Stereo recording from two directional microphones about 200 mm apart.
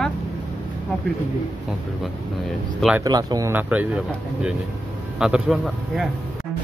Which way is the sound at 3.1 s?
20° right (ahead or behind).